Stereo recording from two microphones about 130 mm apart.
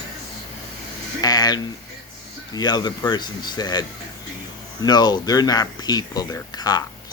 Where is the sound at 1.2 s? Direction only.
30° left (ahead or behind).